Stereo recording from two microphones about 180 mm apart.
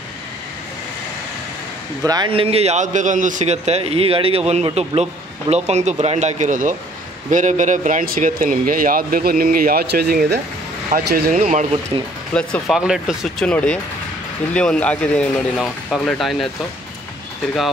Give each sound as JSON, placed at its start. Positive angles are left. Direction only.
{"t": 2.0, "sound": "a man's voice", "side_deg": -25}
{"t": 11.3, "sound": "a man's voice", "side_deg": -35}
{"t": 12.4, "sound": "speech", "side_deg": 0}